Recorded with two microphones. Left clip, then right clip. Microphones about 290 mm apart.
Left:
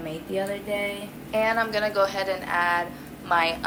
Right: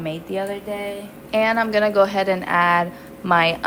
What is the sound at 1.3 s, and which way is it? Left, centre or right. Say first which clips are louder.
A woman's voice: right 5 dB; right.